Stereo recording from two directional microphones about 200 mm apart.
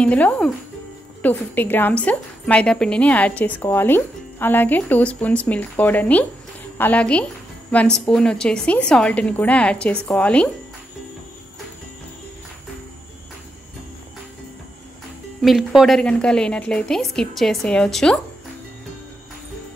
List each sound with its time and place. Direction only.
0.0 s a woman's voice: 5° left (ahead or behind)
15.4 s a woman's voice: centre (ahead or behind)